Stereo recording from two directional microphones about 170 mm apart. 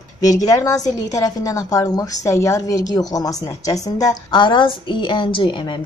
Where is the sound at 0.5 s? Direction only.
20° left (ahead or behind).